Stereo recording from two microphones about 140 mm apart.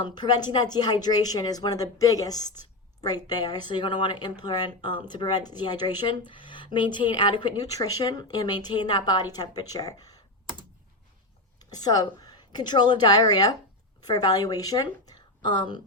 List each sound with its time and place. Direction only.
0.0 s speech: 30° left (ahead or behind)
11.6 s a woman's voice: 30° left (ahead or behind)